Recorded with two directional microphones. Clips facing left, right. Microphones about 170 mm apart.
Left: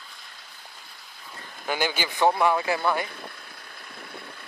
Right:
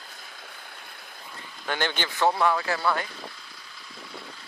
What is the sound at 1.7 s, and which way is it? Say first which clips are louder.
Speech: left 2 dB; 10° left (ahead or behind).